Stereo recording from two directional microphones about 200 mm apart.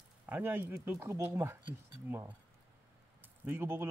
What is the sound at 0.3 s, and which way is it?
Speech, 10° right (ahead or behind).